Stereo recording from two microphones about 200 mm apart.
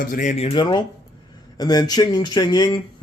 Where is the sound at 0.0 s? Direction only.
40° left (ahead or behind).